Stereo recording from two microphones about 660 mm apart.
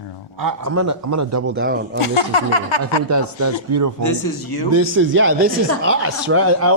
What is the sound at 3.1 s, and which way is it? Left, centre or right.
Speech, right.